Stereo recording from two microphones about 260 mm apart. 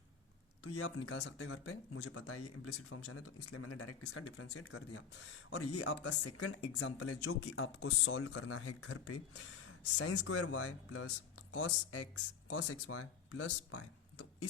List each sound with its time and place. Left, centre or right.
0.6 s speech: left
6.6 s speech: left
6.9 s speech: left
12.5 s speech: left
12.7 s speech: left